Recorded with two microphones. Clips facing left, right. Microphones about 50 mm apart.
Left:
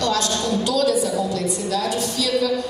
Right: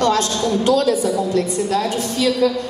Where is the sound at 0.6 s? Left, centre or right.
Right.